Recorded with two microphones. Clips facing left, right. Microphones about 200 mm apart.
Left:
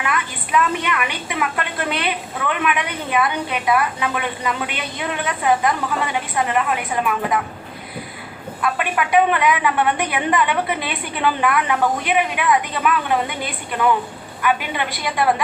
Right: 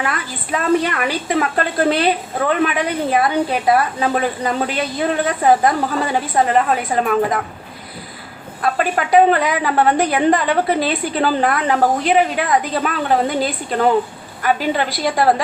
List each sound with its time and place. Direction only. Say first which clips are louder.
0.0 s a woman's voice: right 1 dB; 35° right (ahead or behind)
8.6 s a woman's voice: right 3 dB; 35° right (ahead or behind)